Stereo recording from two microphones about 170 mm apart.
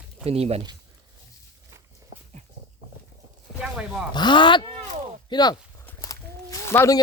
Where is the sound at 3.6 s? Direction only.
5° right (ahead or behind).